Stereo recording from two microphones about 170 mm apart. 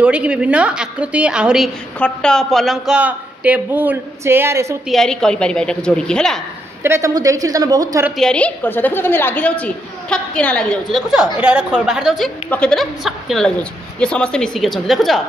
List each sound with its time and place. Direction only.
0.0 s a man's voice: 5° right (ahead or behind)
2.0 s a man's voice: 5° left (ahead or behind); by 4.7 s 15° right (ahead or behind)
4.8 s a woman's voice: centre (ahead or behind)
6.8 s a woman's voice: 15° right (ahead or behind)
8.2 s a woman's voice: 5° left (ahead or behind)